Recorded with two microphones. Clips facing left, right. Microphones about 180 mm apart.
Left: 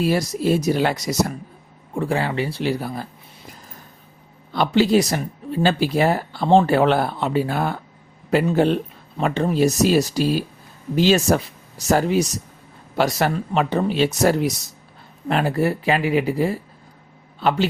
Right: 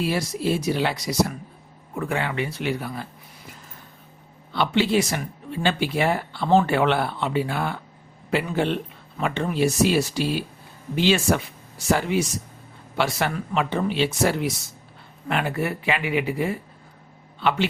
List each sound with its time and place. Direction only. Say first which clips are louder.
0.0 s speech: left 4 dB; 40° left (ahead or behind)
2.0 s speech: left 4 dB; 35° left (ahead or behind)
4.5 s speech: left 4 dB; 40° left (ahead or behind)